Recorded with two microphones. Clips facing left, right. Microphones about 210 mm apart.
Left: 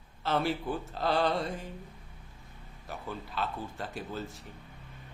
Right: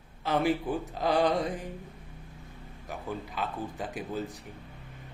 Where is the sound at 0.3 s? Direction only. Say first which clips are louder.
Right 3 dB; 15° right (ahead or behind).